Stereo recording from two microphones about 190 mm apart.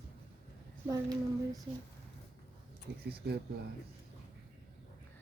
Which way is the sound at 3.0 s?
55° right (ahead or behind).